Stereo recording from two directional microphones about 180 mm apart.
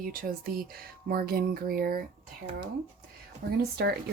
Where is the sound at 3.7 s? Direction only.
60° right (ahead or behind).